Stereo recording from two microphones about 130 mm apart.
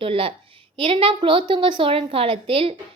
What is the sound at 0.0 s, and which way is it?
A woman's voice, 45° right (ahead or behind).